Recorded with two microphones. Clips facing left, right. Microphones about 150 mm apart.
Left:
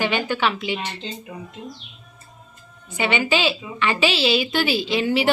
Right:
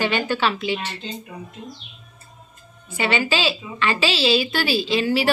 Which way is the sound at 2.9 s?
15° left (ahead or behind).